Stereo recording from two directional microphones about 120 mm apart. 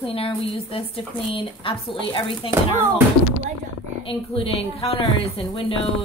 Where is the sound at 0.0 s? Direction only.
50° left (ahead or behind).